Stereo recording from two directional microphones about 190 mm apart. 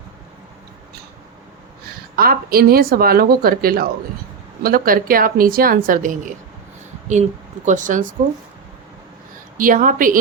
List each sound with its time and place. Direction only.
2.1 s a woman's voice: 50° right (ahead or behind)
9.6 s a woman's voice: 45° right (ahead or behind)